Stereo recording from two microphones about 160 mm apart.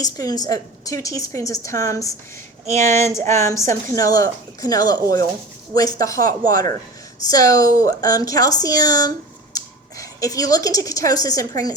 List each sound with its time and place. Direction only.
0.0 s a woman's voice: 25° left (ahead or behind)
2.6 s speech: 45° right (ahead or behind)
3.0 s a sound: 15° left (ahead or behind)
3.4 s a woman's voice: 20° left (ahead or behind)